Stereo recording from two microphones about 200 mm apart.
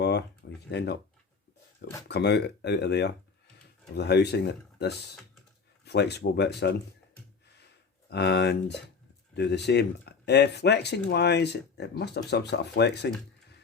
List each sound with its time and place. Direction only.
0.0 s a sound: 55° left (ahead or behind)
0.7 s speech: 55° left (ahead or behind)
2.0 s speech: 55° left (ahead or behind)
8.1 s speech: 55° left (ahead or behind)